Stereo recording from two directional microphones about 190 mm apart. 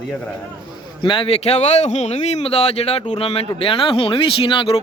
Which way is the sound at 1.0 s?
25° left (ahead or behind).